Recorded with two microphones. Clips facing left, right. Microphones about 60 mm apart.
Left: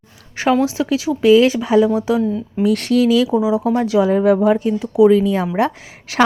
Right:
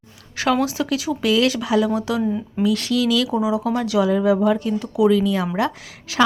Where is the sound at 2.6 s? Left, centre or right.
Left.